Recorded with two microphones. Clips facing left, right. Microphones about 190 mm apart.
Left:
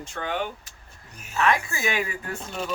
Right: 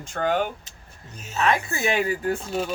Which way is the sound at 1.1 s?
25° right (ahead or behind).